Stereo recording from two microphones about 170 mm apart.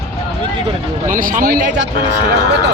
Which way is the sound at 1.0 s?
50° right (ahead or behind).